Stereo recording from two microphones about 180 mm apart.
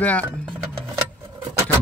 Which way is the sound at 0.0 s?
10° left (ahead or behind).